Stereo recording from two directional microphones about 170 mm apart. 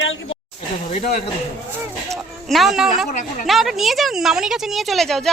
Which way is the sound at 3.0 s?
45° left (ahead or behind).